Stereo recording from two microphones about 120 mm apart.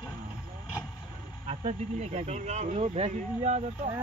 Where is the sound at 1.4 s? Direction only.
65° right (ahead or behind).